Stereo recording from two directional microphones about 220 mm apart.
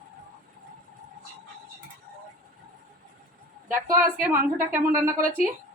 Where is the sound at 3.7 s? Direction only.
40° right (ahead or behind).